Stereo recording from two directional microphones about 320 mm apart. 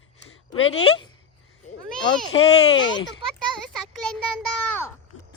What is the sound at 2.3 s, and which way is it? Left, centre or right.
Speech, centre.